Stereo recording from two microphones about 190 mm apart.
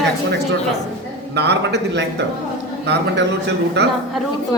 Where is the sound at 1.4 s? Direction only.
65° right (ahead or behind).